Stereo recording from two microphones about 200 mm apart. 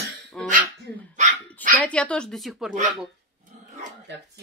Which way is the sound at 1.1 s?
40° right (ahead or behind).